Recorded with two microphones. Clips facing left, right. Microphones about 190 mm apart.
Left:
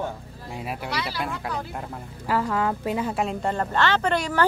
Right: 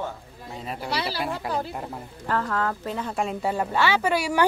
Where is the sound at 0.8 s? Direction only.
30° right (ahead or behind).